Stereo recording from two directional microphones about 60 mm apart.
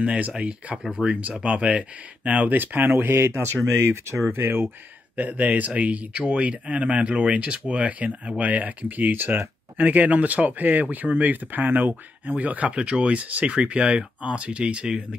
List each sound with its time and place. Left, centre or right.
0.0 s speech: right
5.1 s speech: right
9.8 s speech: right